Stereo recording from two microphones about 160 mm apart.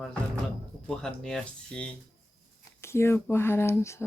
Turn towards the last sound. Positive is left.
turn(degrees=15)  # may be behind; listen again after turning